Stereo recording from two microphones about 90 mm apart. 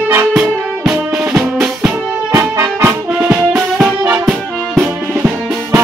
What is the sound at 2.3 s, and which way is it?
Music, 30° right (ahead or behind).